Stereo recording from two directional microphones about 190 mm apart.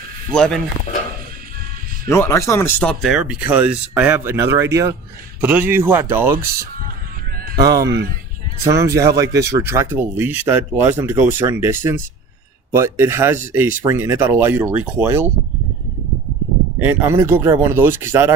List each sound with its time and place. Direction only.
0.3 s speech: 5° left (ahead or behind)
2.0 s speech: 15° left (ahead or behind)
3.0 s speech: centre (ahead or behind)
7.3 s a sound: 50° right (ahead or behind)
7.6 s speech: 15° right (ahead or behind)
7.9 s speech: 65° right (ahead or behind)
8.7 s speech: 15° right (ahead or behind)
16.8 s speech: 10° right (ahead or behind)